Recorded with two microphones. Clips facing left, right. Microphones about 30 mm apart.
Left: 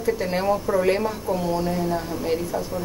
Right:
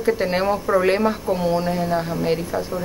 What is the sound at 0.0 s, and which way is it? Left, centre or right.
Speech, right.